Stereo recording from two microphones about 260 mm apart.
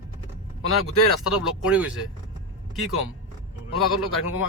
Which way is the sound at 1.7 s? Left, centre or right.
Centre.